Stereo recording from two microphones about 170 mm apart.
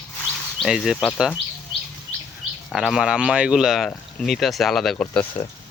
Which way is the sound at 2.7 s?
Centre (ahead or behind).